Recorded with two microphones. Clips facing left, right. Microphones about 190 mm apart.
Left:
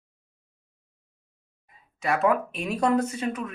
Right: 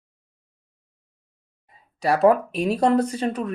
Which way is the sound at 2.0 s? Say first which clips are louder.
Right 6 dB; 35° right (ahead or behind).